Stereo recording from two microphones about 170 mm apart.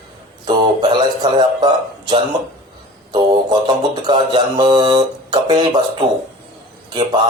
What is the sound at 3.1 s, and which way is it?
Mantra, 25° right (ahead or behind).